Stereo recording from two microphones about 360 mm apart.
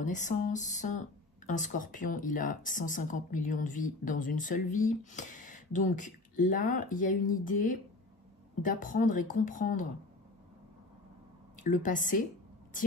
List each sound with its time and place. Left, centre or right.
0.0 s speech: left
11.5 s a woman's voice: left